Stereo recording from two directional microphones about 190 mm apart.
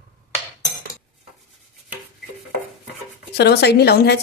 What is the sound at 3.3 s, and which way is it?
Speech, 60° left (ahead or behind).